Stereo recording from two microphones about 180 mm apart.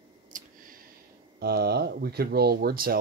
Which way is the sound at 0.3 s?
45° right (ahead or behind).